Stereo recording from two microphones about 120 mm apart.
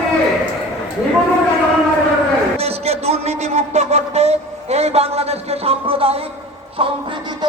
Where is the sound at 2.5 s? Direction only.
60° right (ahead or behind).